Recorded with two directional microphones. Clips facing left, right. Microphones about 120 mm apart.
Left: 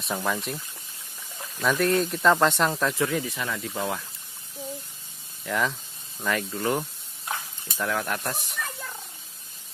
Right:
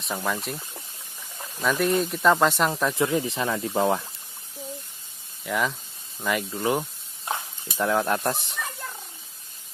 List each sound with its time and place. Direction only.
0.0 s speech: centre (ahead or behind)
1.6 s speech: centre (ahead or behind)
2.9 s speech: 20° right (ahead or behind)
5.4 s speech: 5° right (ahead or behind); by 8.5 s 25° right (ahead or behind)